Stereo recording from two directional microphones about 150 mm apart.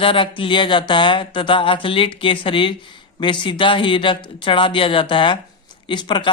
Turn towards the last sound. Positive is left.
turn(degrees=30)  # may be behind; listen again after turning